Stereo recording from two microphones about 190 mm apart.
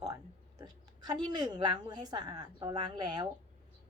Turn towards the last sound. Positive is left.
turn(degrees=-25)  # may be behind; listen again after turning